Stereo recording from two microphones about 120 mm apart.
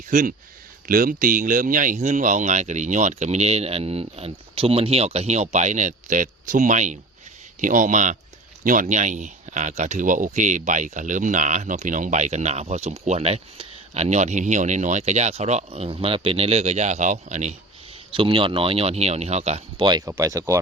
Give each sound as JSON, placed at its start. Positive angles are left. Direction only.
{"t": 0.1, "sound": "speech", "side_deg": -90}
{"t": 1.4, "sound": "speech", "side_deg": -90}
{"t": 18.1, "sound": "speech", "side_deg": -45}
{"t": 19.8, "sound": "speech", "side_deg": -35}
{"t": 20.1, "sound": "speech", "side_deg": -25}